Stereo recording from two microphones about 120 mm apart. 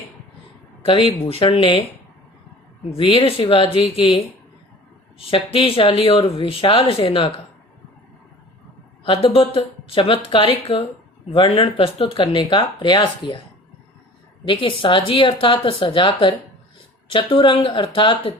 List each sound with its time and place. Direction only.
0.9 s speech: 50° left (ahead or behind)
2.9 s speech: 50° left (ahead or behind)
9.0 s speech: 55° left (ahead or behind)
14.4 s speech: 45° left (ahead or behind)